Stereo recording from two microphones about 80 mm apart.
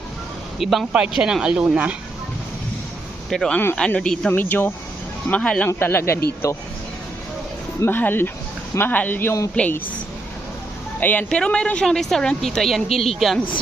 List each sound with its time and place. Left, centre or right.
0.6 s a woman's voice: centre
3.2 s a woman's voice: centre
4.3 s speech: left
5.6 s speech: left
7.9 s speech: left
11.0 s speech: left
11.3 s a woman's voice: centre